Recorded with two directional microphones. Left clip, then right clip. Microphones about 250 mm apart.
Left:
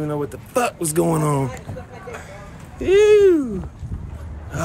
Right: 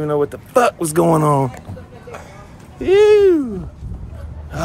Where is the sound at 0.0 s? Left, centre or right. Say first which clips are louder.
Right 7 dB; centre.